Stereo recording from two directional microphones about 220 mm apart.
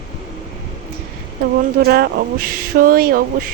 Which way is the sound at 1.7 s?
45° right (ahead or behind).